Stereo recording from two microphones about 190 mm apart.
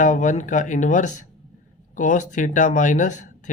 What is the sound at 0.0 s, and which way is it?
Speech, 40° left (ahead or behind).